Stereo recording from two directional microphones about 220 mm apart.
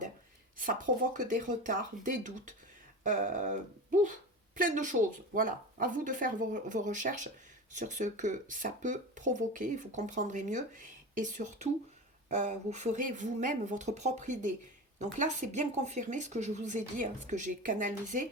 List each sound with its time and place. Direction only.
0.6 s speech: 40° right (ahead or behind)